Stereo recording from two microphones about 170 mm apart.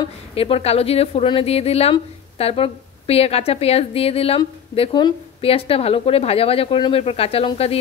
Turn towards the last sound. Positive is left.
turn(degrees=35)  # may be behind; listen again after turning